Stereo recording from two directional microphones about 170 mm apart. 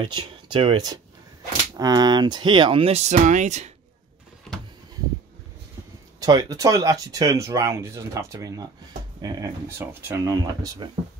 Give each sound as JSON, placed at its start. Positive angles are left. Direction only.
{"t": 0.0, "sound": "speech", "side_deg": -30}
{"t": 4.5, "sound": "a sound", "side_deg": 0}
{"t": 6.1, "sound": "speech", "side_deg": -20}